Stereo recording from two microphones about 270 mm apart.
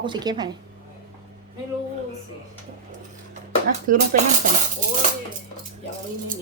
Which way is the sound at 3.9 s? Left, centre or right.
Right.